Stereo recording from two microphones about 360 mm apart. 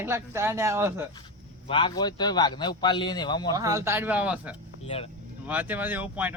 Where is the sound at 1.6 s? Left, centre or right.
Centre.